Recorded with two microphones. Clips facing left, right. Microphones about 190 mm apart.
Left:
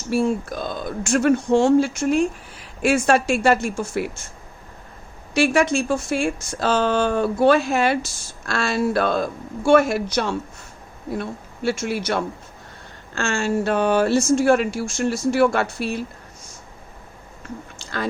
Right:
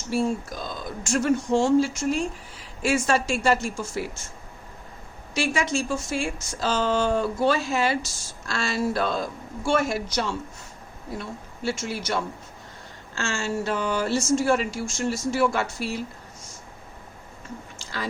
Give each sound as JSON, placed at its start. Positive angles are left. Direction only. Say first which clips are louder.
{"t": 0.1, "sound": "speech", "louder": "left 4 dB", "side_deg": 60}
{"t": 5.3, "sound": "speech", "louder": "left 7 dB", "side_deg": 60}
{"t": 17.7, "sound": "chewing", "louder": "left 6 dB", "side_deg": 55}